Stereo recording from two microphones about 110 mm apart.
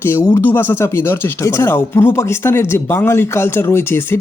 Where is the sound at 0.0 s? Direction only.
25° left (ahead or behind).